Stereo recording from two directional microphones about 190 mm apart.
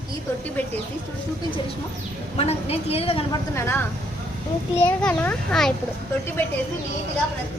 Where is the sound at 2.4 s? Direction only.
35° left (ahead or behind).